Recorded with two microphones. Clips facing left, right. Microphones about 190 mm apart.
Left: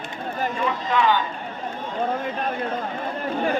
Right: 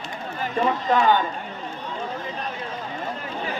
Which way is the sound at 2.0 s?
55° left (ahead or behind).